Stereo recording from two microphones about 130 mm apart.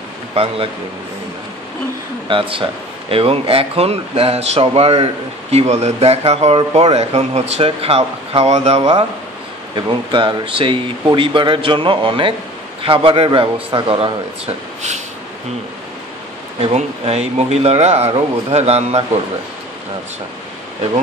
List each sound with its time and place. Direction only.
0.4 s speech: 50° right (ahead or behind)
2.2 s speech: 40° right (ahead or behind)
9.8 s speech: 40° right (ahead or behind); by 15.0 s 55° right (ahead or behind)
16.5 s speech: 50° right (ahead or behind)